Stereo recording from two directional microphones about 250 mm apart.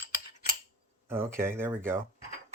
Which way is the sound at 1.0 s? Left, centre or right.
Centre.